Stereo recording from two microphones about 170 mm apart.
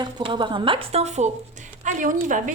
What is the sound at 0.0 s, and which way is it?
A woman's voice, 30° right (ahead or behind).